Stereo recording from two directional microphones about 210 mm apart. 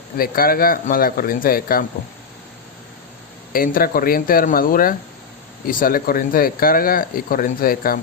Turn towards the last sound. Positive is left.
turn(degrees=45)  # may be behind; listen again after turning